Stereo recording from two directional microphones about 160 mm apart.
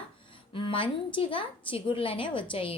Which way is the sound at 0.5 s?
35° left (ahead or behind).